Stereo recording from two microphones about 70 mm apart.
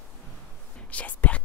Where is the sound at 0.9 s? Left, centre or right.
Left.